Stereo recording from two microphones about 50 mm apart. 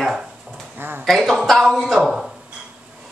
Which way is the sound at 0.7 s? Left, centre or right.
Right.